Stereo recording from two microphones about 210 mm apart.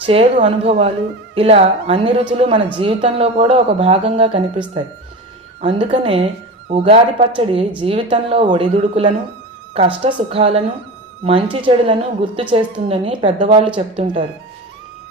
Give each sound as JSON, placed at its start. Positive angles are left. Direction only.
{"t": 0.0, "sound": "a woman's voice", "side_deg": -25}
{"t": 11.6, "sound": "a woman's voice", "side_deg": -25}